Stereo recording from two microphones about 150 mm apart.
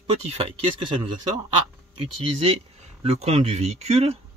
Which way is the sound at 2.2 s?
40° right (ahead or behind).